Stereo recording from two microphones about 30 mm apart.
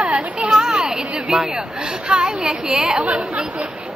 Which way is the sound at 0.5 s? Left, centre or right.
Right.